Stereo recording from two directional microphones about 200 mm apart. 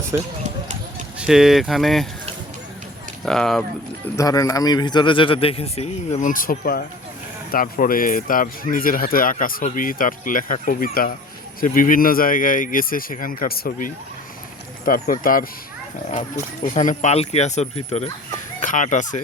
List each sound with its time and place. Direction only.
0.1 s speech: 10° right (ahead or behind)
1.2 s speech: centre (ahead or behind)
3.2 s speech: centre (ahead or behind)
4.2 s speech: 15° left (ahead or behind); by 15.4 s 45° left (ahead or behind)
16.6 s speech: 40° left (ahead or behind)